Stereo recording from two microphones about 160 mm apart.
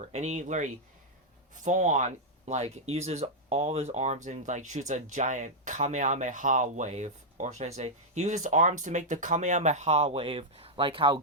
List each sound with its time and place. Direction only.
0.1 s speech: 45° right (ahead or behind)